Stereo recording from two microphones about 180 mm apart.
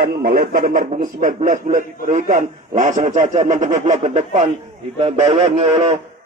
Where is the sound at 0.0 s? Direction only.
55° right (ahead or behind); by 4.5 s 35° right (ahead or behind).